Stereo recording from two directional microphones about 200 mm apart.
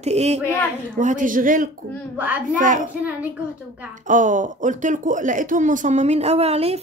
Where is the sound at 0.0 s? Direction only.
35° right (ahead or behind).